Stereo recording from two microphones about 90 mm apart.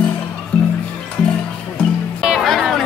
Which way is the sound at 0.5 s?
10° left (ahead or behind).